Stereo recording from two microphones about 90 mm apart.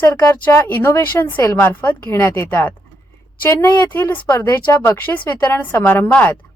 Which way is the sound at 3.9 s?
20° left (ahead or behind).